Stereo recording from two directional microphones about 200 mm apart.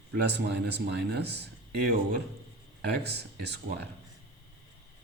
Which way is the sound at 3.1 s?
55° right (ahead or behind).